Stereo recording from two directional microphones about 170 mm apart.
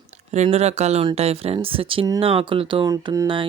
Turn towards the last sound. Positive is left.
turn(degrees=-30)  # may be behind; listen again after turning